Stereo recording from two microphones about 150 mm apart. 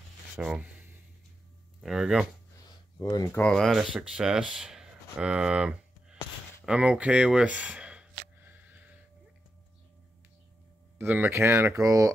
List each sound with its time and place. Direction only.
0.4 s a sound: 10° right (ahead or behind)
1.8 s speech: 5° right (ahead or behind)
3.0 s speech: 25° left (ahead or behind)
3.3 s speech: 5° left (ahead or behind)
6.6 s a sound: 5° right (ahead or behind)
11.0 s speech: 15° right (ahead or behind)